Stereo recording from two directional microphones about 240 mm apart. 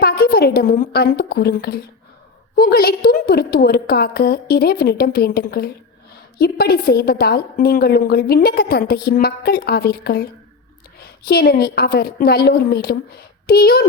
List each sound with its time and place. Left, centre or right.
0.0 s a woman's voice: left